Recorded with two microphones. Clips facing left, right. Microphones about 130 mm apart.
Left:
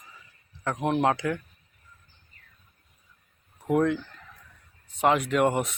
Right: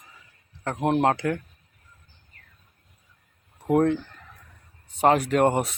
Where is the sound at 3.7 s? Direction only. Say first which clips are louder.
Right 3 dB; 35° right (ahead or behind).